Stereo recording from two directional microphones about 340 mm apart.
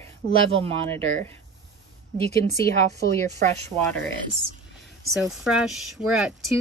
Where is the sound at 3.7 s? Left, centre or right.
Centre.